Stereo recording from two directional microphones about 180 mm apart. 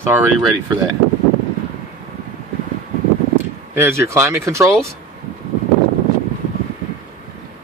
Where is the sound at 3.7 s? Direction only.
15° right (ahead or behind).